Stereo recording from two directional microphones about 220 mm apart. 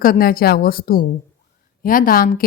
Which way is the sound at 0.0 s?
40° left (ahead or behind).